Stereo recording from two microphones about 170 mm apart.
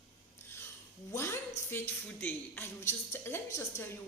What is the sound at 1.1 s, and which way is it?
A woman's voice, 15° left (ahead or behind).